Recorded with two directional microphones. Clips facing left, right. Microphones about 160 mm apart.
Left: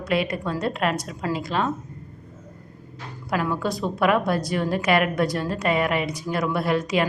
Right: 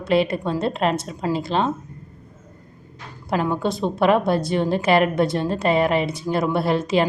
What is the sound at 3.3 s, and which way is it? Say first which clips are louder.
A woman's voice: right 3 dB; 25° right (ahead or behind).